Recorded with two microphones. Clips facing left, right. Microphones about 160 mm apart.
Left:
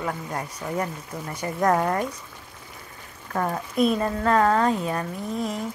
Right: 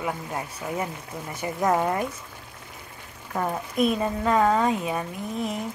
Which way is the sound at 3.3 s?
5° right (ahead or behind).